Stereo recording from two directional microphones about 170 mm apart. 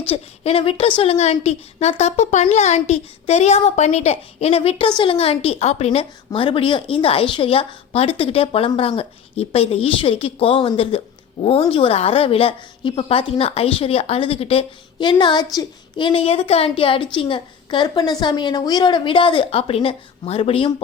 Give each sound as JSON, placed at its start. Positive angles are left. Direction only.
{"t": 0.1, "sound": "a woman's voice", "side_deg": 35}